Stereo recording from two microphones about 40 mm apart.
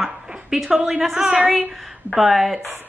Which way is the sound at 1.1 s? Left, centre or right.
Right.